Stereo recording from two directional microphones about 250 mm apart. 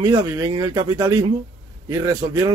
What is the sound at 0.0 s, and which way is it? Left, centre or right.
A man's voice, centre.